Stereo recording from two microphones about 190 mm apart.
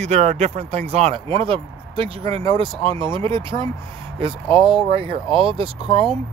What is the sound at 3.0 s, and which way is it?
Speech, 25° right (ahead or behind).